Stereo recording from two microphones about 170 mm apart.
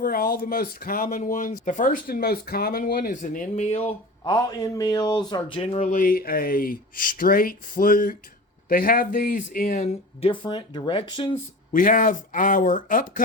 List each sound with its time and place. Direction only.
0.0 s speech: 60° left (ahead or behind); by 3.9 s 40° left (ahead or behind)
4.3 s speech: 25° left (ahead or behind)
5.8 s speech: 50° left (ahead or behind)
10.2 s speech: 30° left (ahead or behind)
11.7 s speech: 55° left (ahead or behind)